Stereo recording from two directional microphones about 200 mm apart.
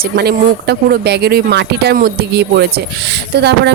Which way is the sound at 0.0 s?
55° right (ahead or behind).